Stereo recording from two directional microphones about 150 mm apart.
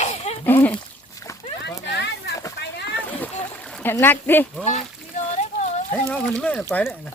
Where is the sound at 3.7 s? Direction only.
5° left (ahead or behind).